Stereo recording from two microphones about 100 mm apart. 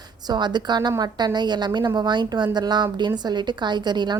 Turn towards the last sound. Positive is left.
turn(degrees=-45)  # may be behind; listen again after turning